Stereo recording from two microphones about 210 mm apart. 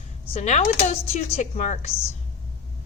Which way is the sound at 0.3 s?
30° left (ahead or behind).